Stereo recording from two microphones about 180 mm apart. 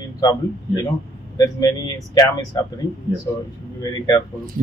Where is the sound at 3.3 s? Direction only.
20° left (ahead or behind).